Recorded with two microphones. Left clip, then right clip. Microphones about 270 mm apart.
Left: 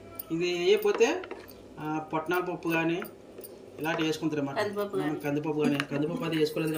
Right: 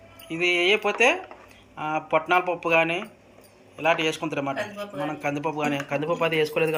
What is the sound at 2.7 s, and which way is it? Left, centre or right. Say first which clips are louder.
Speech: right 8 dB; centre.